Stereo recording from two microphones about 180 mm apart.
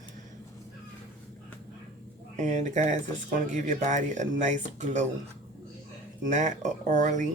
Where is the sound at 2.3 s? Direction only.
40° right (ahead or behind).